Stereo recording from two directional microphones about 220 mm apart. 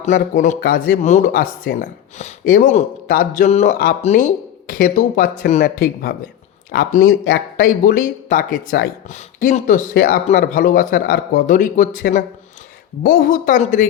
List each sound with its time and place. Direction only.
0.0 s speech: 35° left (ahead or behind)